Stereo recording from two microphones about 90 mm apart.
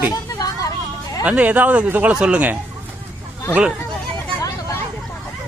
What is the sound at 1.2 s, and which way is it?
Speech, 15° right (ahead or behind).